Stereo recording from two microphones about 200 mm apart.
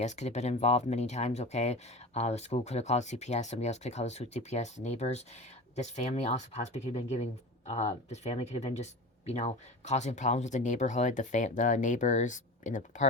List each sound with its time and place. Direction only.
0.0 s speech: 35° left (ahead or behind)